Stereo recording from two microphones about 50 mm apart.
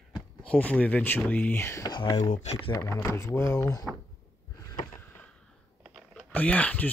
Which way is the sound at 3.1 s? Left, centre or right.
Left.